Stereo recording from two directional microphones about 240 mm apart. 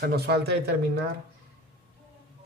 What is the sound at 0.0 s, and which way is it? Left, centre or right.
Speech, right.